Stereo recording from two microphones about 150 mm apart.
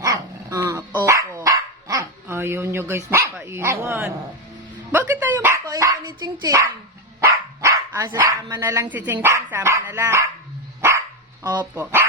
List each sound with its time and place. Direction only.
0.0 s dog: 25° right (ahead or behind)
4.9 s speech: 15° right (ahead or behind)
9.2 s dog: 15° right (ahead or behind)